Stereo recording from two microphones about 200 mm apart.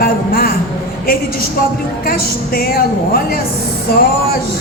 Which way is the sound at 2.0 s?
45° left (ahead or behind).